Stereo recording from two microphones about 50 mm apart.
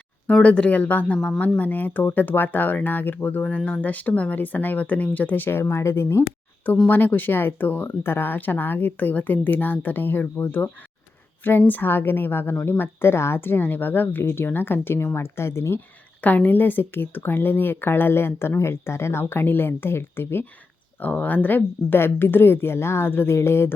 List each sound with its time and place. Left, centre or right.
0.4 s a woman's voice: left
3.4 s a woman's voice: left
5.5 s speech: left
6.8 s a woman's voice: left
14.3 s speech: left
16.2 s speech: left
21.0 s speech: left